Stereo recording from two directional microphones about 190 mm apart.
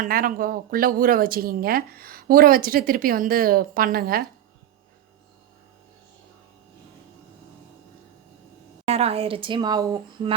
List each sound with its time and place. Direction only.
0.0 s speech: 50° right (ahead or behind)
8.9 s speech: 30° right (ahead or behind)